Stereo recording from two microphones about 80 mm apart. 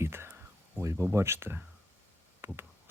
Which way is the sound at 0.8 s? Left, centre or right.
Right.